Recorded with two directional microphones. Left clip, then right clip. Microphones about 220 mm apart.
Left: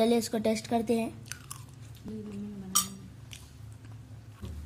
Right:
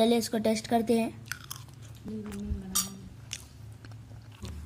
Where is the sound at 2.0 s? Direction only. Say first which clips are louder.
Right 2 dB; centre (ahead or behind).